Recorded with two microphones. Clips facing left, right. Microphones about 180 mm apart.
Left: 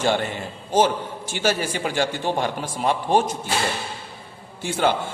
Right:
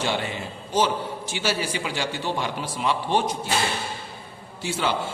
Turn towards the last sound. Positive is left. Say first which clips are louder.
# left 4 dB
turn(degrees=50)  # may be behind; listen again after turning